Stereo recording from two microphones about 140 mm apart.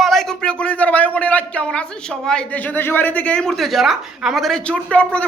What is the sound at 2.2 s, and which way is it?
A man's voice, 10° left (ahead or behind).